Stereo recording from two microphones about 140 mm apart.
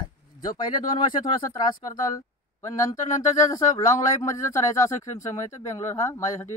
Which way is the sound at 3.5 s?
25° left (ahead or behind).